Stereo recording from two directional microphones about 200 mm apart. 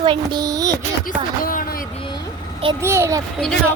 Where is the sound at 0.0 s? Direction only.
25° right (ahead or behind).